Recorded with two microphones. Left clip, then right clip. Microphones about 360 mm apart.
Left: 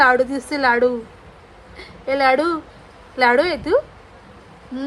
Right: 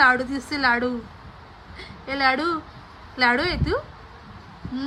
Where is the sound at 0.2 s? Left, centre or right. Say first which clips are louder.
Left 9 dB; left.